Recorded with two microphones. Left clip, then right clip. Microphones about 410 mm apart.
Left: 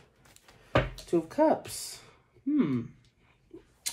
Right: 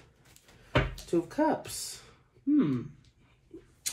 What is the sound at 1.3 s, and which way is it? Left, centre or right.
Speech, left.